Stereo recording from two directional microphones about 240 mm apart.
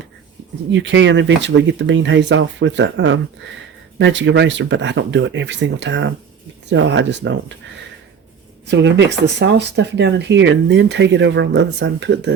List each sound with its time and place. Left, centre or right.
0.7 s speech: right
8.6 s speech: right